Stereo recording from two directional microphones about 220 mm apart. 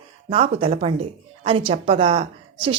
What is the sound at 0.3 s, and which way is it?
A woman's voice, 25° right (ahead or behind).